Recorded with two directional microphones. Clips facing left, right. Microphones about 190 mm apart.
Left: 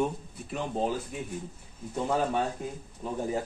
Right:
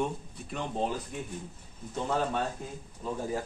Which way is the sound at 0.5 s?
5° left (ahead or behind).